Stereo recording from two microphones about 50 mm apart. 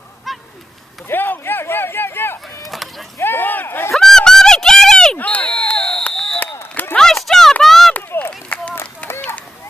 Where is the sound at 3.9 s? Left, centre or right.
Centre.